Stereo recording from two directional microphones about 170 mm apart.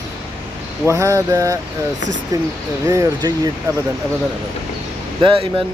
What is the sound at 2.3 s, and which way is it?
Speech, 20° right (ahead or behind).